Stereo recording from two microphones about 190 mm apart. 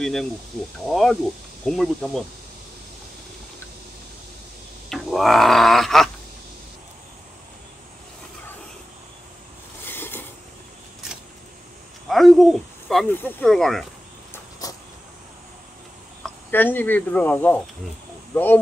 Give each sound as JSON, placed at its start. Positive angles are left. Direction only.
{"t": 0.0, "sound": "speech", "side_deg": 0}
{"t": 4.8, "sound": "speech", "side_deg": 0}
{"t": 9.8, "sound": "a sound", "side_deg": 10}
{"t": 12.1, "sound": "hoot", "side_deg": 0}
{"t": 13.1, "sound": "speech", "side_deg": 5}
{"t": 14.6, "sound": "a sound", "side_deg": 20}
{"t": 16.2, "sound": "speech", "side_deg": 10}